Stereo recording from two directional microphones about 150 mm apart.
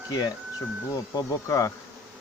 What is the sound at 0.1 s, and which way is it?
Speech, 25° left (ahead or behind).